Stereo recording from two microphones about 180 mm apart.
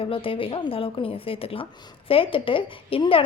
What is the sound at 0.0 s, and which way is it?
A woman's voice, 30° left (ahead or behind).